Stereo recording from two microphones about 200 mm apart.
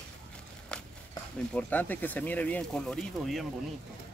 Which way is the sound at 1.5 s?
5° left (ahead or behind).